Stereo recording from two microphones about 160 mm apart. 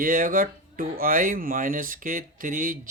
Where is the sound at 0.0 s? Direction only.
60° right (ahead or behind).